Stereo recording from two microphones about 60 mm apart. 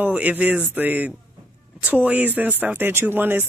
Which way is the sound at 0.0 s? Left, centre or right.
Right.